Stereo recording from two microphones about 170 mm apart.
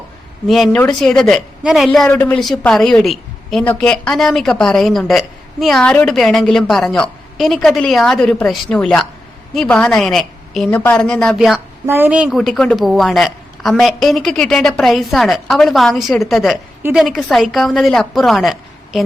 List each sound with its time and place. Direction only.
0.4 s a woman's voice: centre (ahead or behind)